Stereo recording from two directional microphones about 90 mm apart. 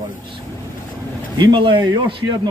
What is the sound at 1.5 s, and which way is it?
Speech, 70° right (ahead or behind).